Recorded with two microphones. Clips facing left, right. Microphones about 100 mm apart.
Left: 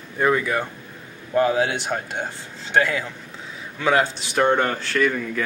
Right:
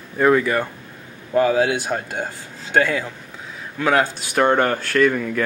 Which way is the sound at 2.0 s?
20° left (ahead or behind).